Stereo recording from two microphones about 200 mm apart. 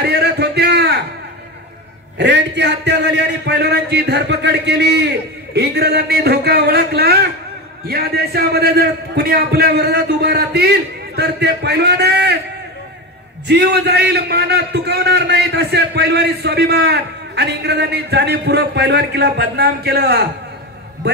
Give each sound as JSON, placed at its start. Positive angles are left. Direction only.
{"t": 0.0, "sound": "a sound", "side_deg": -55}
{"t": 2.1, "sound": "a man's voice", "side_deg": -60}
{"t": 13.5, "sound": "a man's voice", "side_deg": -55}